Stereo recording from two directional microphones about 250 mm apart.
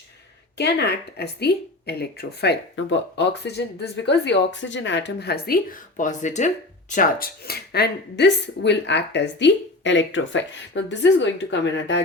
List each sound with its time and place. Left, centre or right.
0.5 s speech: left
6.0 s speech: left